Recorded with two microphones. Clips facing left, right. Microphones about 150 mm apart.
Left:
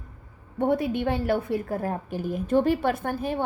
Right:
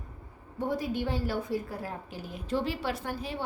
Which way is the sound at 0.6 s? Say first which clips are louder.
Left 7 dB; 60° left (ahead or behind).